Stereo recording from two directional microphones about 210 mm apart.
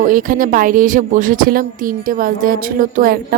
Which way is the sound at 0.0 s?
40° right (ahead or behind).